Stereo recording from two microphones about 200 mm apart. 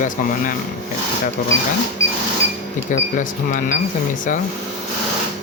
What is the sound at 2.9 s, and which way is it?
Speech, 40° left (ahead or behind).